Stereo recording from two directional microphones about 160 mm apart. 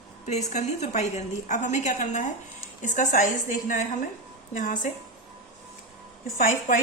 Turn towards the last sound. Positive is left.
turn(degrees=55)  # may be behind; listen again after turning